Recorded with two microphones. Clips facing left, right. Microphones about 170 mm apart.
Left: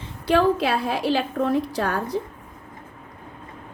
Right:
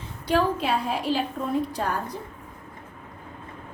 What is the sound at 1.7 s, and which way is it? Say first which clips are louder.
Speech: left 3 dB; 80° left.